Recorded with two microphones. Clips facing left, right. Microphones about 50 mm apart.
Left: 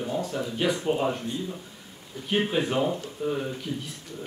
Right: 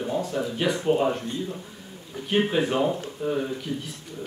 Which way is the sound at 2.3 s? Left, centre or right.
Centre.